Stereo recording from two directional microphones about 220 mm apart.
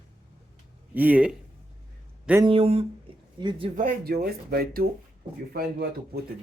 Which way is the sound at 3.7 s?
40° right (ahead or behind).